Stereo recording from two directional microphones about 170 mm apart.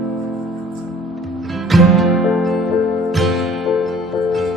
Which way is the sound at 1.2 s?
Centre (ahead or behind).